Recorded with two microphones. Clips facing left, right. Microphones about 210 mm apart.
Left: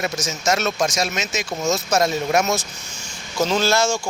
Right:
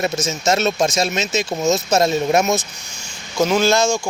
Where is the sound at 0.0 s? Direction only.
25° right (ahead or behind).